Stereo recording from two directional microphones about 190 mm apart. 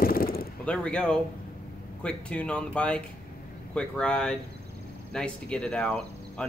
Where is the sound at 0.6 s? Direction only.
5° left (ahead or behind).